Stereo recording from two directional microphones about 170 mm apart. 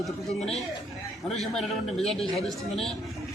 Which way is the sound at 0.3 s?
40° left (ahead or behind).